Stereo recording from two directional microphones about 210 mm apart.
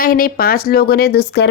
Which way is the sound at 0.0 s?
45° left (ahead or behind).